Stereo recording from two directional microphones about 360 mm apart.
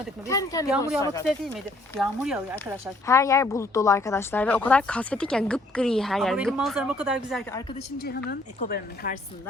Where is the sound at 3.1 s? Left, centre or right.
Centre.